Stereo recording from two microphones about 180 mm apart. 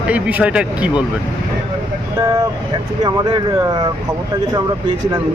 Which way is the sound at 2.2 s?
20° right (ahead or behind).